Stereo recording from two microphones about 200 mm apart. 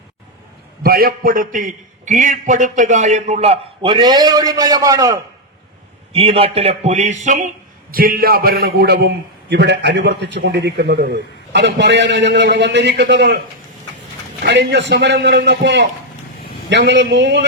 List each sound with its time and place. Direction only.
0.8 s a man's voice: 50° right (ahead or behind); by 5.2 s 15° right (ahead or behind)
6.1 s a man's voice: 30° right (ahead or behind); by 13.4 s 55° right (ahead or behind)
14.4 s a man's voice: 60° right (ahead or behind)